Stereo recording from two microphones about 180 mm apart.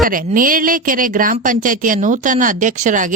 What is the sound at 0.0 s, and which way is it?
Speech, 50° right (ahead or behind).